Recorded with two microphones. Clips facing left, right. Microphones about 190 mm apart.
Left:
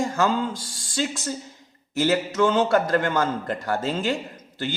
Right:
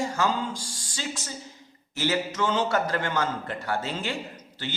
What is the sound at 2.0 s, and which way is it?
A man's voice, 45° left (ahead or behind).